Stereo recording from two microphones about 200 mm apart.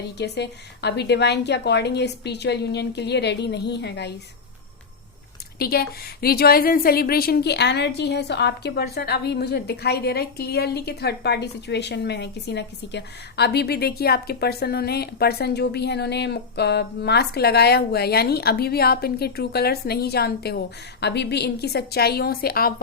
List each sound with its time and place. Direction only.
0.2 s a woman's voice: 55° left (ahead or behind)
5.5 s a woman's voice: 50° left (ahead or behind)